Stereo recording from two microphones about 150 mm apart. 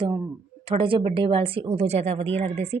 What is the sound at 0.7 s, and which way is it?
Speech, 35° right (ahead or behind).